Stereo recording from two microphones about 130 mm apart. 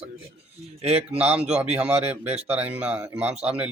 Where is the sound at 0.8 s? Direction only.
50° right (ahead or behind).